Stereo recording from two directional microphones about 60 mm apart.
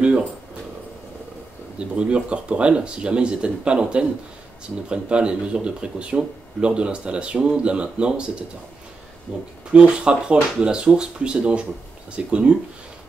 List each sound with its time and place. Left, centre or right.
1.8 s speech: centre